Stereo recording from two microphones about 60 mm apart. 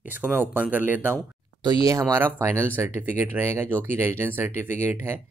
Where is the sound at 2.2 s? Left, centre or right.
Right.